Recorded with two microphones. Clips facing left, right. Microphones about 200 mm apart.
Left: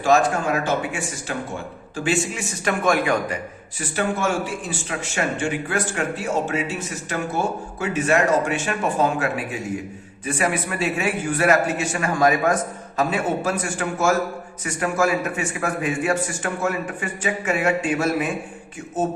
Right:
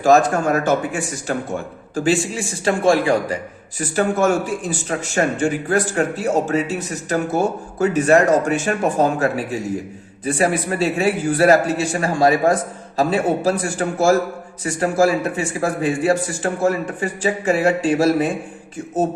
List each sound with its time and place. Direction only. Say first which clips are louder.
0.0 s speech: right 4 dB; 40° right (ahead or behind)
3.8 s speech: right 6 dB; 40° right (ahead or behind)